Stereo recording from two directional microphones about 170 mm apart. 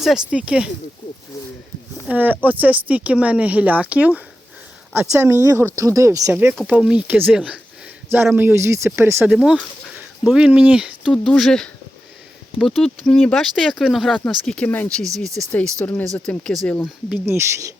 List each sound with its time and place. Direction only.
0.0 s speech: 5° right (ahead or behind)
2.0 s speech: 10° right (ahead or behind)
9.3 s speech: centre (ahead or behind)
17.1 s speech: 15° right (ahead or behind)